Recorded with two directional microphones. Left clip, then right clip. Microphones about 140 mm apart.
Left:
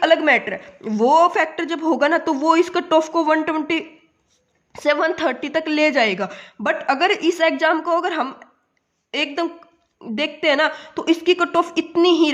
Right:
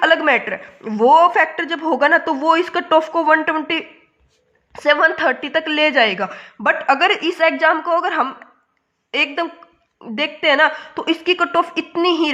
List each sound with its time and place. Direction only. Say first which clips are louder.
0.0 s a woman's voice: right 1 dB; 35° left (ahead or behind)